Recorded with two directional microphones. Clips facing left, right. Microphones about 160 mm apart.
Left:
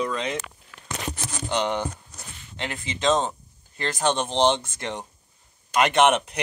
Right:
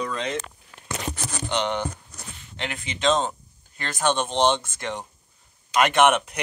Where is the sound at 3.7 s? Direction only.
25° left (ahead or behind).